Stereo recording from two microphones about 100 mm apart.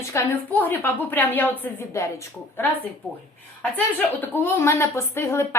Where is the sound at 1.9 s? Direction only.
30° left (ahead or behind).